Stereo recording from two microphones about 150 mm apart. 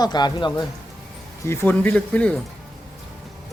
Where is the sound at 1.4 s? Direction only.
15° left (ahead or behind).